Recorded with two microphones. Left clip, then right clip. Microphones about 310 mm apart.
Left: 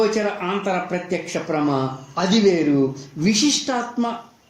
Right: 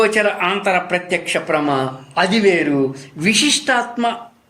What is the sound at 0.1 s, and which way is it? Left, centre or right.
Speech, right.